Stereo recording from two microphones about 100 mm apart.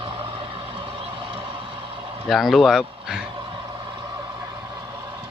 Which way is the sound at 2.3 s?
Centre (ahead or behind).